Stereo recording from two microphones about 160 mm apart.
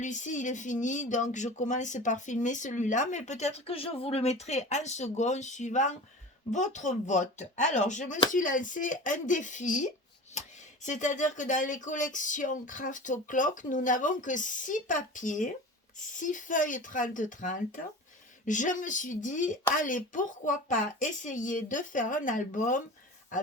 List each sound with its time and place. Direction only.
0.0 s speech: 50° left (ahead or behind)
10.8 s speech: 50° left (ahead or behind)